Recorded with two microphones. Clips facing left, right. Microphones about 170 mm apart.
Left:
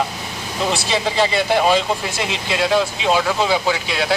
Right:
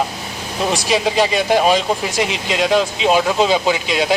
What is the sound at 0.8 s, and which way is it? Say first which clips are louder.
Speech: right 4 dB; 15° right (ahead or behind).